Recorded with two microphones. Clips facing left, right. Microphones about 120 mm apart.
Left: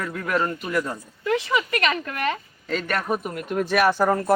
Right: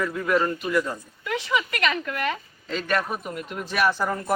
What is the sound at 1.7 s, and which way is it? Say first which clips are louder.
A woman's voice: left 2 dB; 40° left (ahead or behind).